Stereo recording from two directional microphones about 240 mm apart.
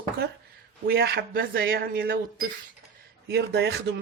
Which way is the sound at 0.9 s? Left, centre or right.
Right.